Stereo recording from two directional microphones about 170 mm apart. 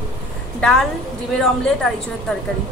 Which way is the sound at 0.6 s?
5° left (ahead or behind).